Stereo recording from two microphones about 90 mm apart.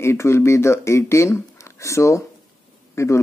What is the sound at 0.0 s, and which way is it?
Speech, 30° left (ahead or behind).